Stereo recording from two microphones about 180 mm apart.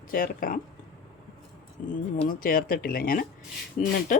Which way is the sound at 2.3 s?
55° left (ahead or behind).